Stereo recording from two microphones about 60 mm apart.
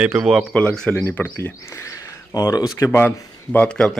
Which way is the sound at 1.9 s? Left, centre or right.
Left.